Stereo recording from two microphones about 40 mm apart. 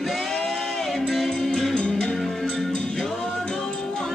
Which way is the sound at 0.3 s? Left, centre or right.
Centre.